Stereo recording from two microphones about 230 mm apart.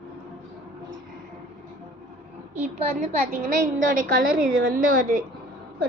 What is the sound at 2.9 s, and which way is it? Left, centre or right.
A woman's voice, right.